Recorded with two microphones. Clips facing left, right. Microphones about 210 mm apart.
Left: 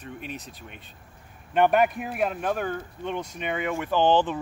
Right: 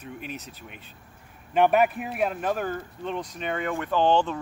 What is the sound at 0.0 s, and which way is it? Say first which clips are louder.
Speech: even; 5° right (ahead or behind).